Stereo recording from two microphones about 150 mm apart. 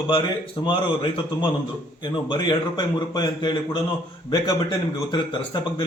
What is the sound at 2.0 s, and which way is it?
A man's voice, 30° left (ahead or behind).